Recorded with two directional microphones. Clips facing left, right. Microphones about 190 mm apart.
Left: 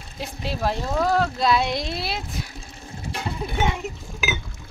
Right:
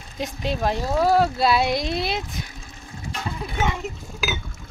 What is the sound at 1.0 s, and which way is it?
Speech, 10° right (ahead or behind).